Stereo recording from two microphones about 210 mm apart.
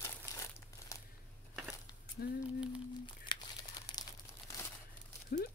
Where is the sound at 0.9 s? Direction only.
15° left (ahead or behind).